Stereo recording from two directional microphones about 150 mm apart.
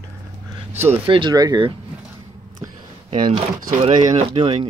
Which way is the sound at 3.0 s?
35° right (ahead or behind).